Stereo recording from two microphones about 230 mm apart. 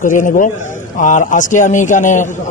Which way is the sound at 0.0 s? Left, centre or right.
Left.